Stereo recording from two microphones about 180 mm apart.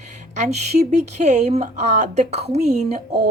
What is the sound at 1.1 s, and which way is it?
A woman's voice, 40° right (ahead or behind).